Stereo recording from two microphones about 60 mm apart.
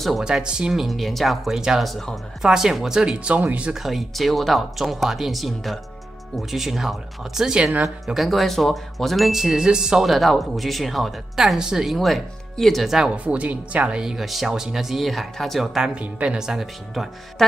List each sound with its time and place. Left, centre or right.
0.2 s speech: centre
0.8 s speech: centre
1.9 s speech: centre
2.4 s speech: centre
3.3 s speech: right
3.7 s speech: centre
13.1 s speech: right
14.0 s speech: centre
15.9 s speech: centre